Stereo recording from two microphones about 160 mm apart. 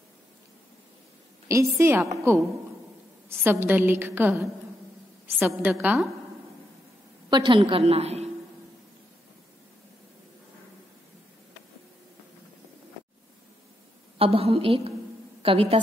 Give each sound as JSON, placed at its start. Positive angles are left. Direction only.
{"t": 1.5, "sound": "a woman's voice", "side_deg": -15}
{"t": 7.2, "sound": "a woman's voice", "side_deg": -30}
{"t": 14.1, "sound": "a woman's voice", "side_deg": -35}